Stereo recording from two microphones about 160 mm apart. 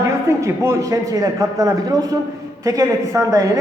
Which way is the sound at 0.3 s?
15° right (ahead or behind).